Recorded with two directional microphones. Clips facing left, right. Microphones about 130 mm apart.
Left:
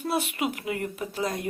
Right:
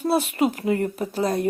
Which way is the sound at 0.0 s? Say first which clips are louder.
Right 7 dB; 40° right (ahead or behind).